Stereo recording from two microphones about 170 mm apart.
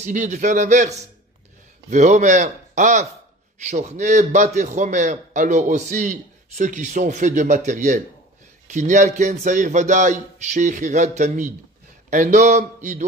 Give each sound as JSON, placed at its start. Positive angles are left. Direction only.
{"t": 0.0, "sound": "a man's voice", "side_deg": -45}